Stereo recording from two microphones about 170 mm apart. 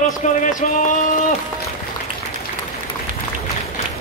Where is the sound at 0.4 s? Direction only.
50° left (ahead or behind).